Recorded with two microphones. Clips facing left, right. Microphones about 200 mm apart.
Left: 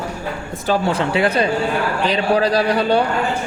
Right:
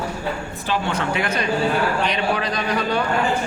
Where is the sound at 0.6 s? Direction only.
35° left (ahead or behind).